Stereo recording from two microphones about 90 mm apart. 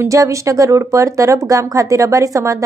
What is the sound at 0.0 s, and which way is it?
Speech, 35° right (ahead or behind).